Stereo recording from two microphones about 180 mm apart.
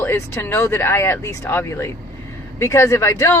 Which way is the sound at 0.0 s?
10° left (ahead or behind).